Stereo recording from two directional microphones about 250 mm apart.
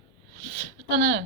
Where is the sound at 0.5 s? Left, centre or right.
Right.